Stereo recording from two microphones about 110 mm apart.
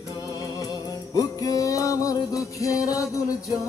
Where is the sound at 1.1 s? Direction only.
30° left (ahead or behind).